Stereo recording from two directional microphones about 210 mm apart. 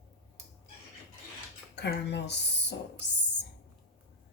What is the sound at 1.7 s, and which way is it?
Speech, 55° left (ahead or behind).